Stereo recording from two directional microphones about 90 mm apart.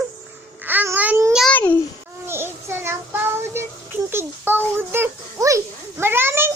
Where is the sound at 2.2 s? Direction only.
25° right (ahead or behind).